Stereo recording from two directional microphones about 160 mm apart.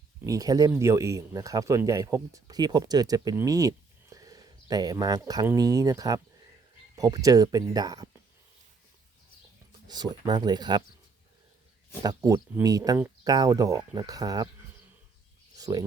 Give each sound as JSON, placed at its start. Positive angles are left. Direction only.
{"t": 0.3, "sound": "speech", "side_deg": -25}
{"t": 9.8, "sound": "speech", "side_deg": -25}
{"t": 12.0, "sound": "speech", "side_deg": -20}
{"t": 15.5, "sound": "a sound", "side_deg": -25}